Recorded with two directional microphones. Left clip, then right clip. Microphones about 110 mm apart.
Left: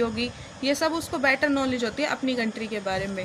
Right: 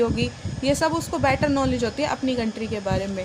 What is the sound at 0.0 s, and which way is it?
A woman's voice, 40° right (ahead or behind).